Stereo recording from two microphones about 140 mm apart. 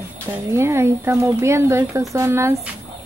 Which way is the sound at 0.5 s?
20° right (ahead or behind).